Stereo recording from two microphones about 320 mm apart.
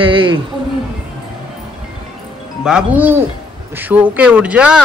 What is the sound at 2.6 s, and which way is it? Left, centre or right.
Speech, centre.